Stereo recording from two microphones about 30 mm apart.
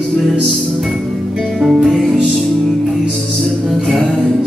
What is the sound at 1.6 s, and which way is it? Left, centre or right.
Music, centre.